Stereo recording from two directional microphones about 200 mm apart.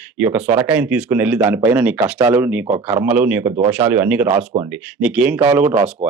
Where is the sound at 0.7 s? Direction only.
5° right (ahead or behind).